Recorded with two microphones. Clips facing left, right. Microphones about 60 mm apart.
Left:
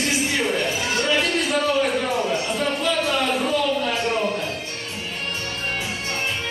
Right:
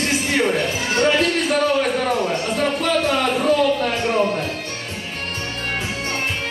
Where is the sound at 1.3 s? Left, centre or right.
Right.